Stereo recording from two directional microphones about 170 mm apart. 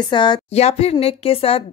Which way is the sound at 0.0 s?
25° left (ahead or behind).